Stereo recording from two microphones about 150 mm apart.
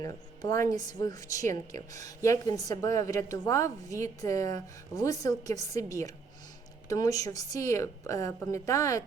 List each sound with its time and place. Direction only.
0.0 s a woman's voice: 20° left (ahead or behind)